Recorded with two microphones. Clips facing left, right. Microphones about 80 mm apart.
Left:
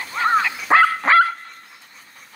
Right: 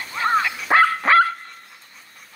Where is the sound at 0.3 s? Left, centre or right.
Centre.